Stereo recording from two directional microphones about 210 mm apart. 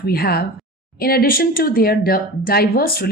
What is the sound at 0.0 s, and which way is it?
Speech, 45° left (ahead or behind).